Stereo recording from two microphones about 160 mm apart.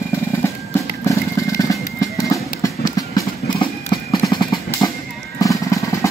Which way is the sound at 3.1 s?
25° left (ahead or behind).